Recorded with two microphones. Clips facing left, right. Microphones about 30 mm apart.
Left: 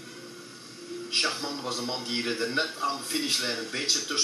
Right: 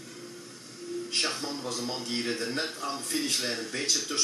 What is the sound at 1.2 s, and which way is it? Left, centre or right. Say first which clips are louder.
A man's voice: left 2 dB; centre.